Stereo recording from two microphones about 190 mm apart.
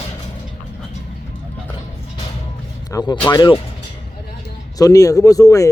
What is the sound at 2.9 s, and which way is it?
Speech, 20° left (ahead or behind).